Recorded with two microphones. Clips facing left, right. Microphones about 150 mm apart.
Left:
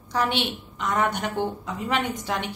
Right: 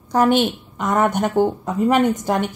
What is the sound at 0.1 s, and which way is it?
Speech, 45° right (ahead or behind).